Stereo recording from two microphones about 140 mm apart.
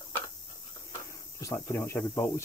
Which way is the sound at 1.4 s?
20° left (ahead or behind).